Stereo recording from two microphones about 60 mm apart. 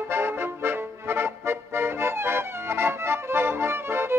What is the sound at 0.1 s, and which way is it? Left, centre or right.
Music, right.